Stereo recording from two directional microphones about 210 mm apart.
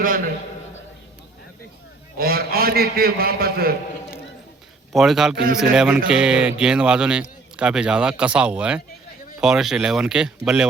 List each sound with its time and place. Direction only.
2.1 s a man's voice: 45° right (ahead or behind)
4.9 s a man's voice: centre (ahead or behind)